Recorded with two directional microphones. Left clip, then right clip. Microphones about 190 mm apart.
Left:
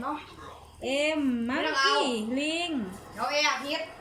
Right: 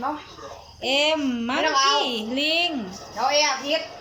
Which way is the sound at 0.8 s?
25° left (ahead or behind).